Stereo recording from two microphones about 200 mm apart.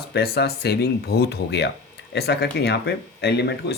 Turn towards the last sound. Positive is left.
turn(degrees=55)  # may be behind; listen again after turning